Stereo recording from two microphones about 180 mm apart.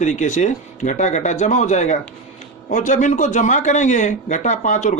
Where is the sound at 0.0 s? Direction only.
40° left (ahead or behind).